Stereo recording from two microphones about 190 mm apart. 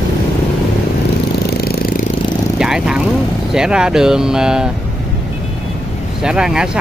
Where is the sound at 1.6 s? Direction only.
50° left (ahead or behind).